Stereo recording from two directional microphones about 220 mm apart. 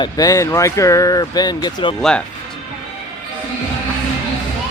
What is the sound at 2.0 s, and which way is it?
Speech, 5° left (ahead or behind).